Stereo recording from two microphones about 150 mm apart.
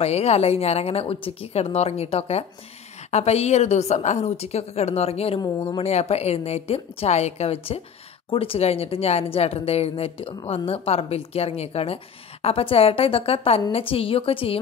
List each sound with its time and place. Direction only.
0.0 s a woman's voice: 45° left (ahead or behind)